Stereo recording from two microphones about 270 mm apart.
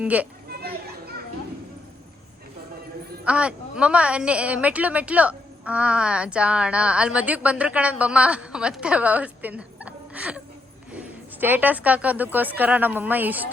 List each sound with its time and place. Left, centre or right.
0.0 s a woman's voice: centre
0.4 s children playing: right
3.2 s a woman's voice: centre